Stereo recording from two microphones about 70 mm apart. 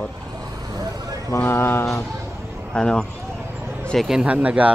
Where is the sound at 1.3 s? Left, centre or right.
Left.